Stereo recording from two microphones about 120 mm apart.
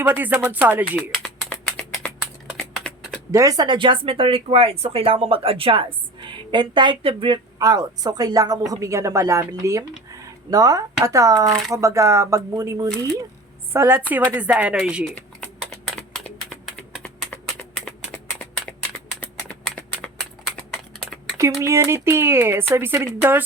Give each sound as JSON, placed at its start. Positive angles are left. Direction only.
{"t": 0.0, "sound": "speech", "side_deg": -15}
{"t": 1.1, "sound": "a sound", "side_deg": 10}
{"t": 2.6, "sound": "typing", "side_deg": 5}
{"t": 3.3, "sound": "speech", "side_deg": -30}
{"t": 13.7, "sound": "speech", "side_deg": -20}
{"t": 15.7, "sound": "typing", "side_deg": 5}
{"t": 18.1, "sound": "a sound", "side_deg": 10}
{"t": 21.6, "sound": "speech", "side_deg": -25}